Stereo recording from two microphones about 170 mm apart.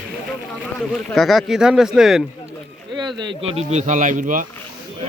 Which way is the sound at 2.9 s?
25° right (ahead or behind).